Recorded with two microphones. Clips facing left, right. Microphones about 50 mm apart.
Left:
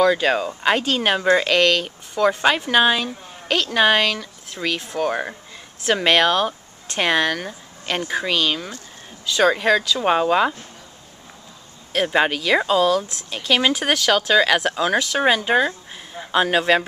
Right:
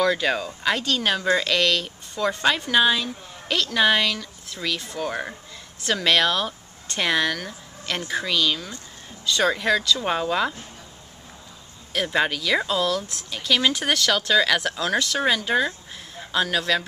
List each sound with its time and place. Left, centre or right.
0.0 s a woman's voice: centre
9.2 s a woman's voice: centre
11.9 s a woman's voice: left
15.1 s a woman's voice: left